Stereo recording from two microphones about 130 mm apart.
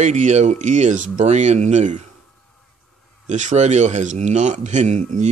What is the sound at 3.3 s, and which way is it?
A man's voice, 70° right (ahead or behind).